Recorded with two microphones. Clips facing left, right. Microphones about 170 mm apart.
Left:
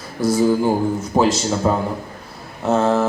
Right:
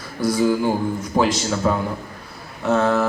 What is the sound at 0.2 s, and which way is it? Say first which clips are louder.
A man's voice: left 2 dB; 25° left (ahead or behind).